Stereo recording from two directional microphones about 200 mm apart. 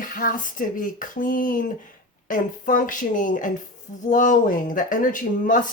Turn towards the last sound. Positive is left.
turn(degrees=40)  # may be behind; listen again after turning